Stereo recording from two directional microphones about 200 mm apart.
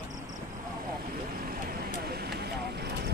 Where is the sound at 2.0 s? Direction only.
50° right (ahead or behind).